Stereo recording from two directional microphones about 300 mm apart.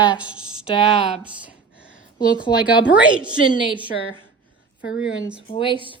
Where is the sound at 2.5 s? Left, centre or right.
Centre.